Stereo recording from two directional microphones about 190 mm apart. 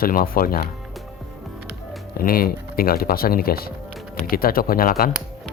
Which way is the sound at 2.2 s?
50° left (ahead or behind).